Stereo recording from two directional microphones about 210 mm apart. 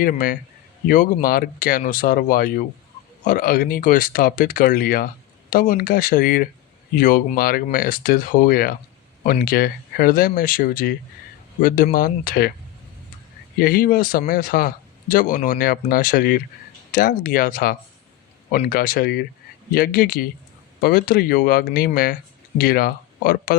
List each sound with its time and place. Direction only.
0.0 s a man's voice: 40° left (ahead or behind)
13.6 s speech: 45° left (ahead or behind)